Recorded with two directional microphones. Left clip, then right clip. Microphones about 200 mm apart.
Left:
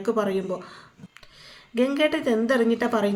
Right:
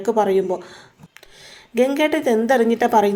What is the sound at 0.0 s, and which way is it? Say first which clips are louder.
A woman's voice: right 7 dB; 10° right (ahead or behind).